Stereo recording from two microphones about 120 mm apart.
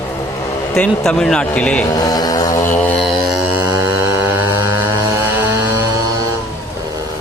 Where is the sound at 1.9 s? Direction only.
30° left (ahead or behind).